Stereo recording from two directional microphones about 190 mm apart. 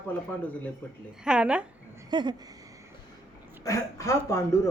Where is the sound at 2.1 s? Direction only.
25° right (ahead or behind).